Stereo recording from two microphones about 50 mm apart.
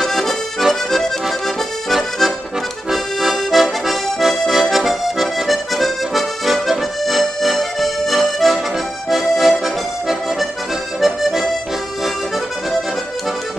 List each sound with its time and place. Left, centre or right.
0.0 s accordion: centre
11.0 s accordion: centre